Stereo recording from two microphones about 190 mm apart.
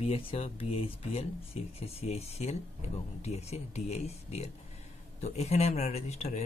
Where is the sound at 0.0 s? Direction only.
30° left (ahead or behind).